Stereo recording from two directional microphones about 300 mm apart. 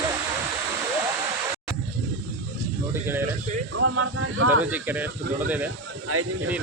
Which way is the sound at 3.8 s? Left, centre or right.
Right.